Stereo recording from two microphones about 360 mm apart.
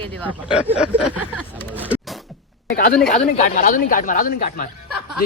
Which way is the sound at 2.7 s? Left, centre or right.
Left.